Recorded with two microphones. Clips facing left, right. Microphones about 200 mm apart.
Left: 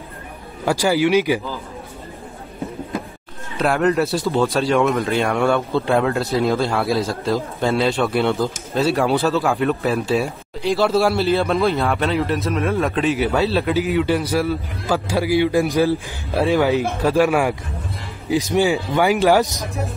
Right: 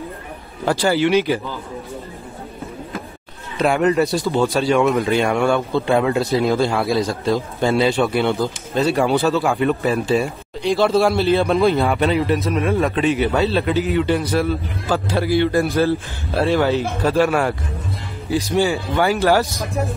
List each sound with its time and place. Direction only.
0.7 s speech: 10° left (ahead or behind)
3.5 s speech: centre (ahead or behind); by 19.4 s 15° left (ahead or behind)